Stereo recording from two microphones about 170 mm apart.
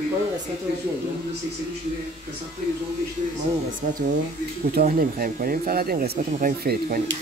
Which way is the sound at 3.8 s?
55° right (ahead or behind).